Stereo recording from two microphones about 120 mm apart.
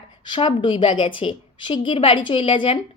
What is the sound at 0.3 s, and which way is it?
A woman's voice, 45° left (ahead or behind).